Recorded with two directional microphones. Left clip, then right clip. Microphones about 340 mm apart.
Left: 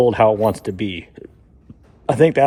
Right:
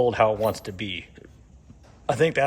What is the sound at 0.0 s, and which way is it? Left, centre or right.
A man's voice, left.